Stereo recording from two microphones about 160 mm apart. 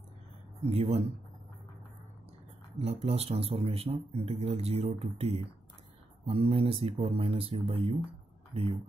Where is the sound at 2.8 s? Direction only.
40° right (ahead or behind).